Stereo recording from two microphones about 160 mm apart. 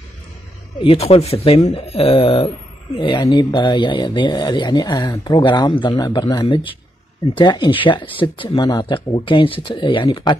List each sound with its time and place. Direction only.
0.7 s speech: 35° left (ahead or behind)